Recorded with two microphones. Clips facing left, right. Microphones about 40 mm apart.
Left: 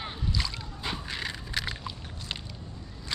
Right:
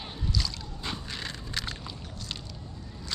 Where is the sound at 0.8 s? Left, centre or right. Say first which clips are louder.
Left 2 dB; centre.